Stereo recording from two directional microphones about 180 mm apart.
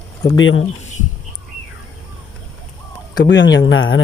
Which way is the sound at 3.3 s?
80° left.